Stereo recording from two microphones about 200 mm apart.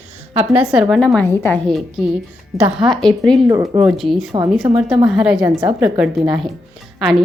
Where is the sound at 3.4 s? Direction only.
15° right (ahead or behind).